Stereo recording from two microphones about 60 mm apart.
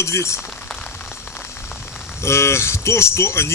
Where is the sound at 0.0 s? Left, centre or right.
Left.